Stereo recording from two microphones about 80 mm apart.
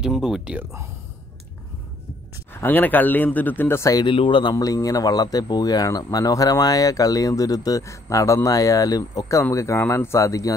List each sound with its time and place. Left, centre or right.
0.0 s speech: centre
2.5 s speech: left
4.0 s speech: left
4.6 s speech: left